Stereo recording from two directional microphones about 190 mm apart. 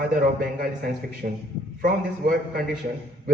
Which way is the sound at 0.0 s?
50° right (ahead or behind).